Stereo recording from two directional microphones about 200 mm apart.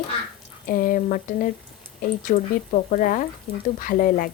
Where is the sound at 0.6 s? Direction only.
45° left (ahead or behind).